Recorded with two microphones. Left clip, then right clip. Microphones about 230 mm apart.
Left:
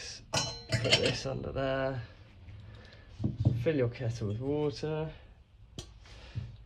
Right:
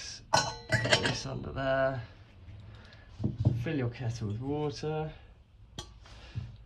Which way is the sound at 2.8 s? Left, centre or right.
Centre.